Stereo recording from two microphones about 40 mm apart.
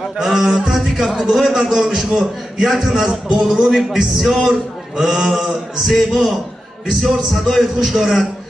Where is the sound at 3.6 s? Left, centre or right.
Centre.